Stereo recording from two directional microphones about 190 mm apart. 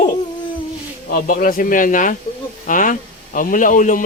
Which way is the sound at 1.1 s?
45° left (ahead or behind).